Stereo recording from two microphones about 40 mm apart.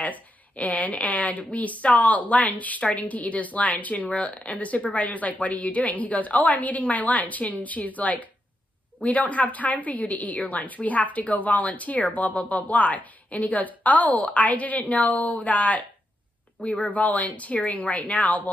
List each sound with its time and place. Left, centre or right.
0.0 s speech: left